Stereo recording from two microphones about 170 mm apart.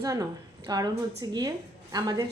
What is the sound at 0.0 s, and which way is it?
A woman's voice, 20° right (ahead or behind).